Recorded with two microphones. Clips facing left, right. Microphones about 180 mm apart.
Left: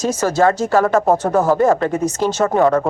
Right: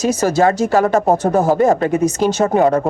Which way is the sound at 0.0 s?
15° right (ahead or behind).